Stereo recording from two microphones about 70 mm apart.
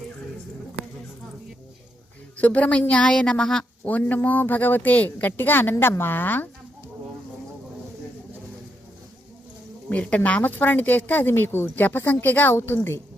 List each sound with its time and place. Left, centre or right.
2.4 s a woman's voice: left
3.8 s a woman's voice: left
9.9 s a woman's voice: centre; by 13.0 s left